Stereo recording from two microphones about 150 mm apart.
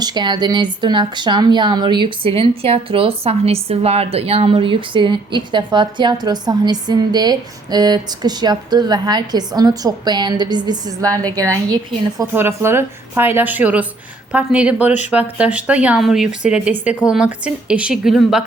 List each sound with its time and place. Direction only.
0.0 s a woman's voice: 30° right (ahead or behind); by 18.4 s centre (ahead or behind)